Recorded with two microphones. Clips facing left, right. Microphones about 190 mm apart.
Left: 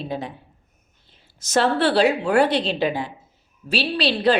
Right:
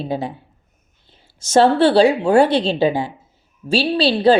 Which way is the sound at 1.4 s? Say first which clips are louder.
Right 6 dB; 30° right (ahead or behind).